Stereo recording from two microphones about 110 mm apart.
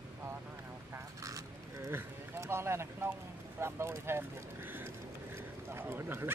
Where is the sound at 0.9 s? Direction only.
30° right (ahead or behind).